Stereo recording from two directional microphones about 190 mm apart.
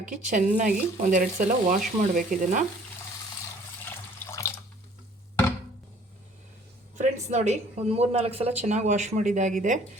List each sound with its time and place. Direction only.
0.0 s speech: 45° right (ahead or behind)
3.8 s water: 15° left (ahead or behind)
7.0 s a woman's voice: 35° right (ahead or behind)